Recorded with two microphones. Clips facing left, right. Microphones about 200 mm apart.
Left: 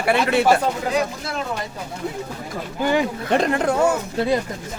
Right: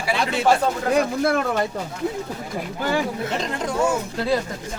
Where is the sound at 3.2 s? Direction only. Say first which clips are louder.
Left 7 dB; 60° left (ahead or behind).